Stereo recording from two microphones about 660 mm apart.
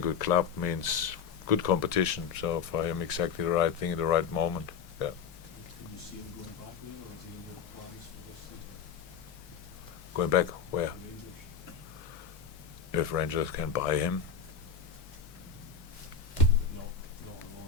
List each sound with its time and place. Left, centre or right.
0.2 s speech: left
10.2 s speech: left
12.9 s speech: left